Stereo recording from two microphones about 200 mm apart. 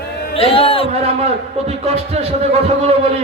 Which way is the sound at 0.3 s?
30° left (ahead or behind).